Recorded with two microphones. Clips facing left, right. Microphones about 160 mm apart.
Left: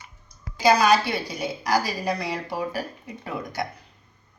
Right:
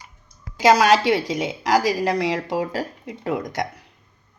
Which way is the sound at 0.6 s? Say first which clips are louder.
Right 3 dB; 85° right.